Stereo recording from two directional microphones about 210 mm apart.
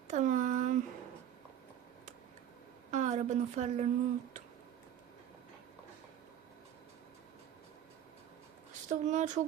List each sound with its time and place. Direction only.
0.1 s a sound: 35° right (ahead or behind)
2.9 s a woman's voice: 35° right (ahead or behind)
8.9 s speech: 35° right (ahead or behind)